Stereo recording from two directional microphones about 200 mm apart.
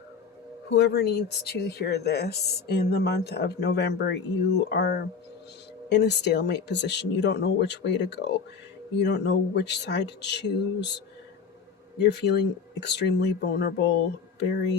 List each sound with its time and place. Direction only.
0.7 s speech: 55° left (ahead or behind)
12.0 s speech: 55° left (ahead or behind)